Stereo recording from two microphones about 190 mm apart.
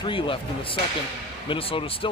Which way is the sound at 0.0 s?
25° left (ahead or behind).